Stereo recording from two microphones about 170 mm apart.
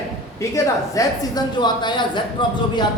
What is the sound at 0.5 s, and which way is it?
A woman's voice, 20° left (ahead or behind).